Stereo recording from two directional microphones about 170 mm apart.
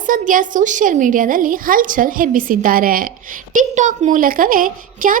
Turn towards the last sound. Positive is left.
turn(degrees=-55)  # may be behind; listen again after turning